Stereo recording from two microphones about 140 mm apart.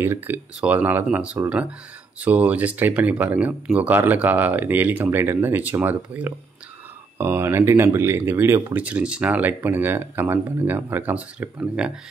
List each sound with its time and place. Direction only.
0.0 s speech: 15° right (ahead or behind)